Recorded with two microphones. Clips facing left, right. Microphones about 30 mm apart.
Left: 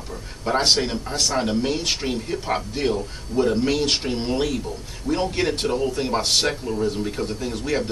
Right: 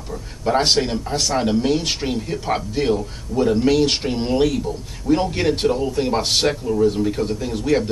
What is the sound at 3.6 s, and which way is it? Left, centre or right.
A man's voice, centre.